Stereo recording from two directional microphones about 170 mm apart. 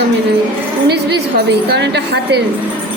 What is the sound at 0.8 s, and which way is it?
A woman's voice, 75° right (ahead or behind).